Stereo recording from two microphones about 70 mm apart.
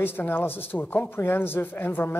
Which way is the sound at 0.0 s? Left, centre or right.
Left.